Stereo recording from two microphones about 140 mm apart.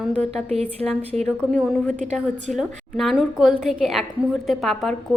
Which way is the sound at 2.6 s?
Centre (ahead or behind).